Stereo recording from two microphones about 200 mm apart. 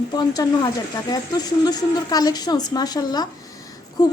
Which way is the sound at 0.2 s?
20° left (ahead or behind).